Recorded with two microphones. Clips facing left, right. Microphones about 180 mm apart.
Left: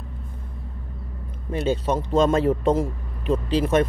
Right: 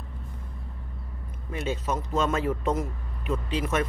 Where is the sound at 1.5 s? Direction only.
30° left (ahead or behind).